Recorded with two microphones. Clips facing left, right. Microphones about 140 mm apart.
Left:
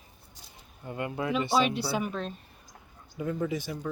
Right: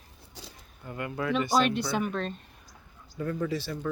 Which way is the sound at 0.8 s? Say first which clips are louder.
Even; 25° left (ahead or behind).